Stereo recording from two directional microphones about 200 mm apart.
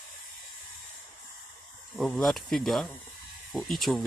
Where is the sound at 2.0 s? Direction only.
Centre (ahead or behind).